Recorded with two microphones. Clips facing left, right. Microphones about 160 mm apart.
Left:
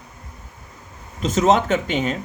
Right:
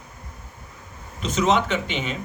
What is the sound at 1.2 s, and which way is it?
Speech, 45° left (ahead or behind).